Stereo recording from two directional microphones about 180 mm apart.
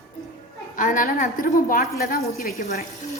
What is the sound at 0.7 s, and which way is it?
A woman's voice, 45° left (ahead or behind).